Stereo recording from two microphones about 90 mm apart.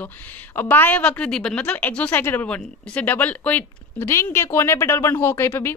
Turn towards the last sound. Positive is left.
turn(degrees=25)  # may be behind; listen again after turning